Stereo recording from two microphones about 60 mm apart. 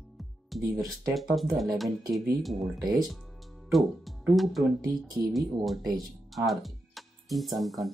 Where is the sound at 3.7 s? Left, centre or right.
Centre.